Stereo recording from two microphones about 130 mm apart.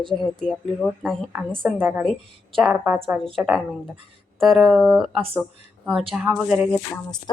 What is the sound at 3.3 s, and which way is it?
Speech, centre (ahead or behind).